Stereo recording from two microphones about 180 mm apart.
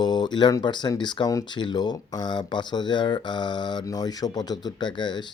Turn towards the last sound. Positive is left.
turn(degrees=25)  # may be behind; listen again after turning